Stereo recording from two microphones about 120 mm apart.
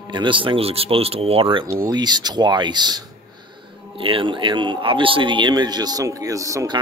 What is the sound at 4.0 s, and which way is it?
A man's voice, 45° right (ahead or behind).